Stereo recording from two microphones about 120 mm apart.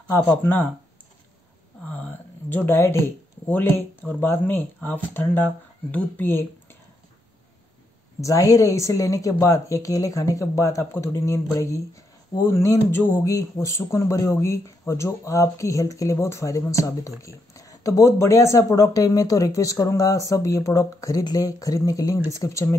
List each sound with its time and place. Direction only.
0.1 s speech: 15° left (ahead or behind)
1.9 s speech: 15° left (ahead or behind)
8.2 s speech: 25° left (ahead or behind)